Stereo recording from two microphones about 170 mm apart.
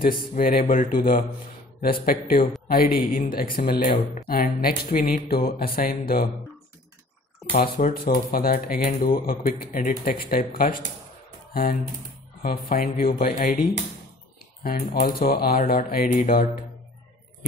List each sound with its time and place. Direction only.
0.3 s speech: 55° left (ahead or behind)
7.6 s speech: 60° left (ahead or behind)